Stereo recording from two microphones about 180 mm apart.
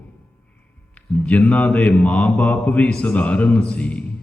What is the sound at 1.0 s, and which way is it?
Mantra, 5° left (ahead or behind).